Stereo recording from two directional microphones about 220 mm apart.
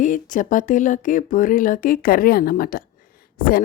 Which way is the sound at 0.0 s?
35° left (ahead or behind).